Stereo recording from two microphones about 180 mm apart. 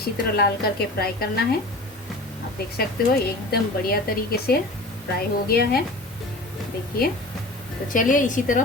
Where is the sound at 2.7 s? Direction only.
55° left (ahead or behind).